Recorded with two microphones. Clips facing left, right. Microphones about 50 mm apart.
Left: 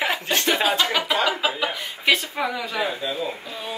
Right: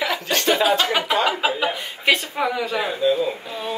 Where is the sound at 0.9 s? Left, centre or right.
Right.